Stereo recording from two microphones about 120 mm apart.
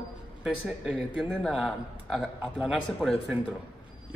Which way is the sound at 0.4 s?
5° right (ahead or behind).